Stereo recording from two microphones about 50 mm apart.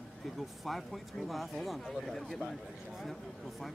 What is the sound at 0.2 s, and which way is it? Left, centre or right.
Speech, centre.